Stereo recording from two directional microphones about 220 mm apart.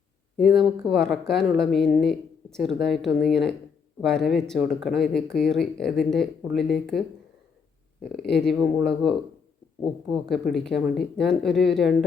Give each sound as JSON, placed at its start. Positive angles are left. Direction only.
{"t": 0.3, "sound": "speech", "side_deg": 0}
{"t": 8.3, "sound": "speech", "side_deg": 0}
{"t": 9.8, "sound": "speech", "side_deg": 0}